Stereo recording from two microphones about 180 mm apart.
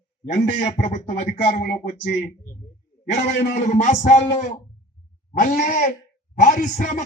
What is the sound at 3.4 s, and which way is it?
A man's voice, 45° left (ahead or behind).